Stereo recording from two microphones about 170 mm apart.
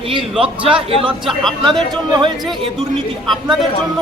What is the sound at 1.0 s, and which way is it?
Speech, centre (ahead or behind).